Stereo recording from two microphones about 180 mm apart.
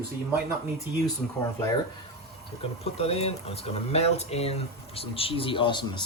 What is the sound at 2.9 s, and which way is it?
Speech, 35° left (ahead or behind).